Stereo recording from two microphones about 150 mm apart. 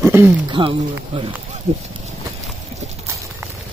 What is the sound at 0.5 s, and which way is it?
Speech, 35° right (ahead or behind).